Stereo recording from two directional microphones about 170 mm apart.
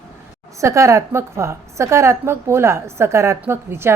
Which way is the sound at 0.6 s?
20° right (ahead or behind).